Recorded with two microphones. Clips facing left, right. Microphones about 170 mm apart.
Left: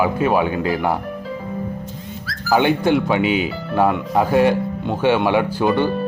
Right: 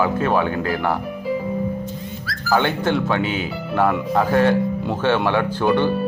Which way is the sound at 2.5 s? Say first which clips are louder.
Left 3 dB; 15° left (ahead or behind).